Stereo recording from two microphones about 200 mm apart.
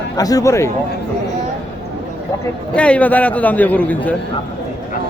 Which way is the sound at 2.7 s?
5° left (ahead or behind).